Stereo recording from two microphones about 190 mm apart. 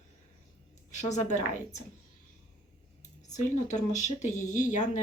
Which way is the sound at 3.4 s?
40° left (ahead or behind).